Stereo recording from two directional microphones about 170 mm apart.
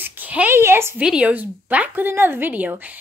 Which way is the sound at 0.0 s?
10° right (ahead or behind).